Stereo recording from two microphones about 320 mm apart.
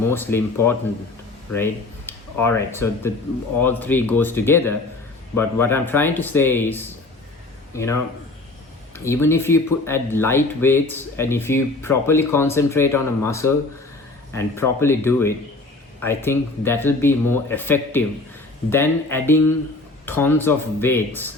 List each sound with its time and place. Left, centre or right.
0.0 s speech: centre
9.0 s speech: centre